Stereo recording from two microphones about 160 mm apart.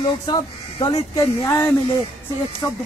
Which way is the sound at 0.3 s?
25° left (ahead or behind).